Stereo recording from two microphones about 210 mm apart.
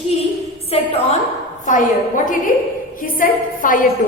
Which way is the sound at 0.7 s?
30° left (ahead or behind).